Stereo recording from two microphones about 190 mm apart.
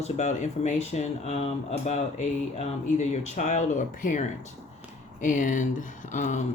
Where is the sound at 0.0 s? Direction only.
35° left (ahead or behind).